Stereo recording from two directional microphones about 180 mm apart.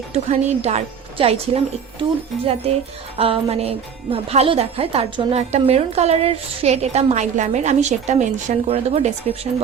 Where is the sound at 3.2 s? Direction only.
35° right (ahead or behind).